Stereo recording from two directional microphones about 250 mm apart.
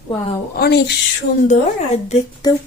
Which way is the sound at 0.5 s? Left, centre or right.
Left.